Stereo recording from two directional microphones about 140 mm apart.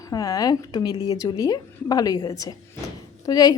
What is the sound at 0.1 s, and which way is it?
A woman's voice, 25° left (ahead or behind).